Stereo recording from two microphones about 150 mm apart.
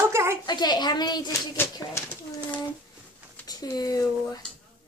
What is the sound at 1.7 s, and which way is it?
Bird, 15° left (ahead or behind).